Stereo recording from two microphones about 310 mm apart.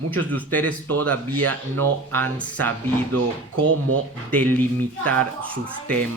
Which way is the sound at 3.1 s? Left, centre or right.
Right.